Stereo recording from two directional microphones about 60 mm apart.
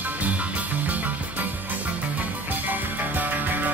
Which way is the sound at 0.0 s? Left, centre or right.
Right.